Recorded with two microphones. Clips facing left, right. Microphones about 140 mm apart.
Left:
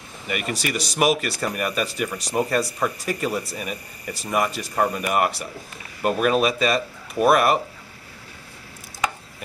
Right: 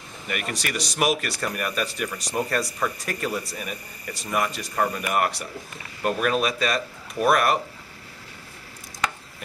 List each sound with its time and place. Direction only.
0.3 s speech: centre (ahead or behind)